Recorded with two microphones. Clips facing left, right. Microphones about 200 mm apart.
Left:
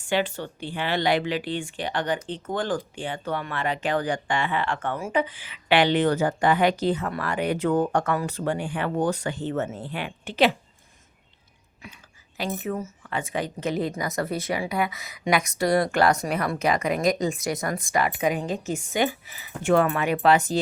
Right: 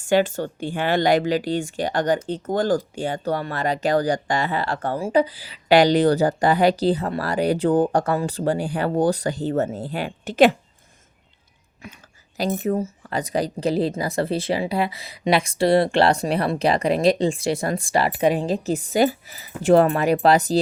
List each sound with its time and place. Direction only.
0.0 s speech: 45° right (ahead or behind)
12.4 s speech: 40° right (ahead or behind)